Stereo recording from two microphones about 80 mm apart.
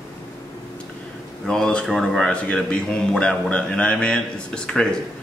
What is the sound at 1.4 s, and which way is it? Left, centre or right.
A man's voice, centre.